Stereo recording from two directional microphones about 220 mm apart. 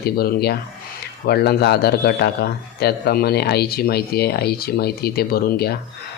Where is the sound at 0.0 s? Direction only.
45° left (ahead or behind).